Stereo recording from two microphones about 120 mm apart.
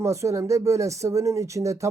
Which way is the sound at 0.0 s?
25° right (ahead or behind).